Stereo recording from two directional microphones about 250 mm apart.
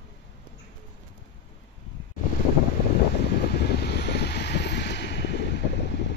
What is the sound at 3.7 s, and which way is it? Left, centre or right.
Vehicle, left.